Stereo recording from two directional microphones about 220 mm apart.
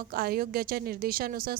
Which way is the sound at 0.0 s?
45° right (ahead or behind).